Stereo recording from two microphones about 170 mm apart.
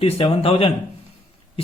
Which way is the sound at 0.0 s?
35° left (ahead or behind).